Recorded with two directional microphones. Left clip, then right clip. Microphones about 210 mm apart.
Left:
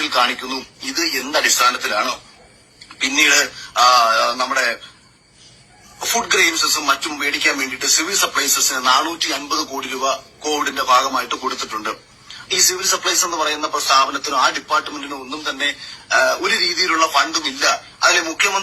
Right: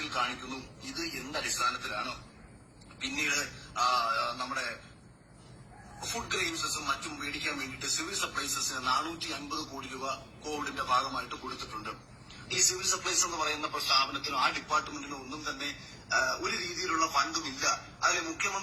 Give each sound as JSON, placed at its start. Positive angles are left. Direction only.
{"t": 0.0, "sound": "speech", "side_deg": 40}
{"t": 3.2, "sound": "speech", "side_deg": 35}
{"t": 6.0, "sound": "speech", "side_deg": 35}